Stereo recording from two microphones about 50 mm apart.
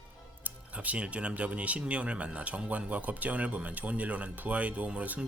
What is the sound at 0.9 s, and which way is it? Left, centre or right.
Speech, right.